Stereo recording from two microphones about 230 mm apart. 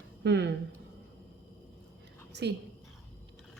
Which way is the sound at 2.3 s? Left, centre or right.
Right.